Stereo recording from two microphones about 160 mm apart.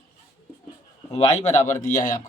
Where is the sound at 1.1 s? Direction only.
45° left (ahead or behind).